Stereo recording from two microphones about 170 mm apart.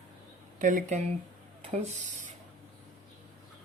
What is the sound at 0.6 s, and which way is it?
Speech, 50° right (ahead or behind).